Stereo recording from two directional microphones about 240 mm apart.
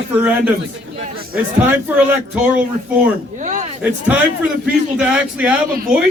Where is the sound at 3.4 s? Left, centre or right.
Right.